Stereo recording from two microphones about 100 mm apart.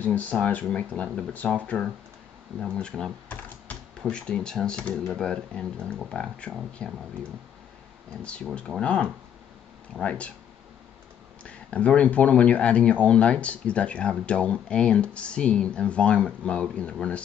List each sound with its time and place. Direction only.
0.0 s speech: 15° left (ahead or behind)
2.6 s speech: 5° left (ahead or behind)
3.3 s typing: 15° left (ahead or behind)
4.0 s speech: 10° left (ahead or behind)
8.2 s speech: 10° left (ahead or behind)
11.4 s speech: 10° left (ahead or behind)